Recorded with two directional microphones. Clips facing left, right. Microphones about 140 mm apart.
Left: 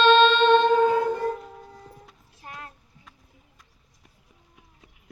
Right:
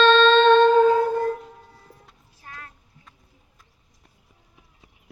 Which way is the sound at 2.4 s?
25° left (ahead or behind).